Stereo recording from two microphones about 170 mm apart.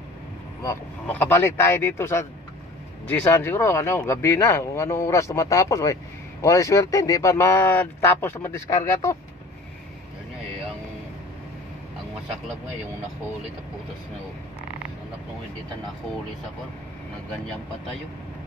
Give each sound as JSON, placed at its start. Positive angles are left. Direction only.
{"t": 1.0, "sound": "speech", "side_deg": 10}